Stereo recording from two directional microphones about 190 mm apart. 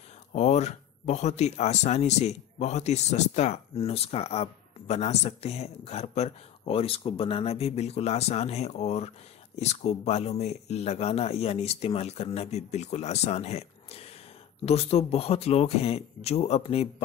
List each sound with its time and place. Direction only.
0.3 s speech: 35° left (ahead or behind)